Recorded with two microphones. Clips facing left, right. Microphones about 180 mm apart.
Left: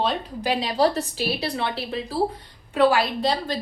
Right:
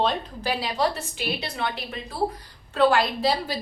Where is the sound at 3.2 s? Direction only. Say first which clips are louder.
Even; 5° right (ahead or behind).